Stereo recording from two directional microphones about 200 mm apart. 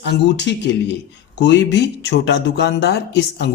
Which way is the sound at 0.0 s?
60° left (ahead or behind).